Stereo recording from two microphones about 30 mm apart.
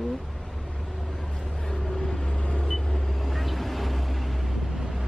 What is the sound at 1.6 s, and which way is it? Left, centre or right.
Vehicle, centre.